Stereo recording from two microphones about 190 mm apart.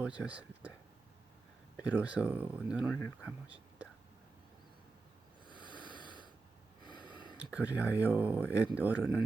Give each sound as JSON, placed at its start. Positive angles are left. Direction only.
{"t": 0.0, "sound": "speech", "side_deg": -5}
{"t": 1.8, "sound": "speech", "side_deg": -5}
{"t": 5.5, "sound": "snort", "side_deg": 25}
{"t": 7.3, "sound": "speech", "side_deg": -5}